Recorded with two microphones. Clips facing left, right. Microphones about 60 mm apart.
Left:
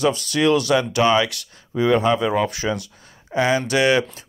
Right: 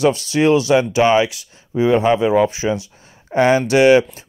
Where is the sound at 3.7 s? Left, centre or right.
Right.